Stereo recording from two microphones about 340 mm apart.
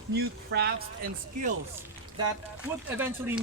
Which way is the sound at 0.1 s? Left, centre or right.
Right.